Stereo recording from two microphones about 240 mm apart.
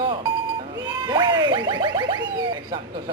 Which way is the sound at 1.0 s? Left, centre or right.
Centre.